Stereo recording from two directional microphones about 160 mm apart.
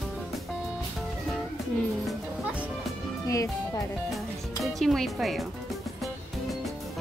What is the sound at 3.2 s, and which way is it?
Music, 20° left (ahead or behind).